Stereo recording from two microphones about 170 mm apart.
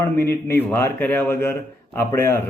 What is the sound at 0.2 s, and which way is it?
Speech, 15° left (ahead or behind).